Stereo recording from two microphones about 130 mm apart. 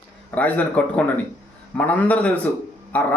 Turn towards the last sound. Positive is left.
turn(degrees=10)  # may be behind; listen again after turning